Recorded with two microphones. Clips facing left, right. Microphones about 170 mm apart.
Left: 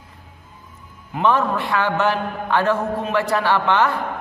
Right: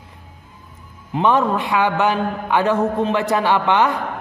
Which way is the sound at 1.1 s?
20° right (ahead or behind).